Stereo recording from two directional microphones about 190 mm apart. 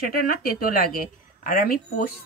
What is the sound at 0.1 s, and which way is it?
Speech, 50° left (ahead or behind).